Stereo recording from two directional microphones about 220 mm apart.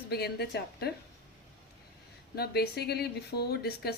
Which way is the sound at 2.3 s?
45° left (ahead or behind).